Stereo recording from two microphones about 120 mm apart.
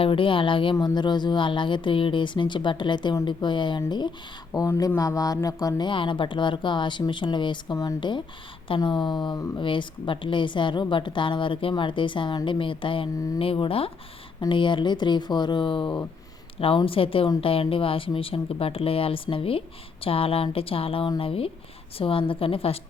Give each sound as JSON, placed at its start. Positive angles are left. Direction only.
{"t": 0.0, "sound": "a woman's voice", "side_deg": 45}
{"t": 8.6, "sound": "a woman's voice", "side_deg": 45}